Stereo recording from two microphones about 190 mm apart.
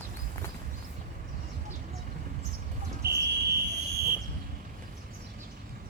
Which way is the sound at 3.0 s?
60° right (ahead or behind).